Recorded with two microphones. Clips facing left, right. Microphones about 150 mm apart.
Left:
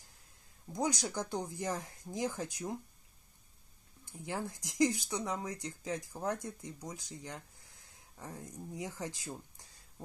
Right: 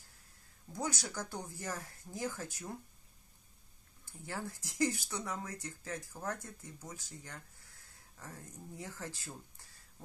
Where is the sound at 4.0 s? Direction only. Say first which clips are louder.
Left 3 dB; 15° left (ahead or behind).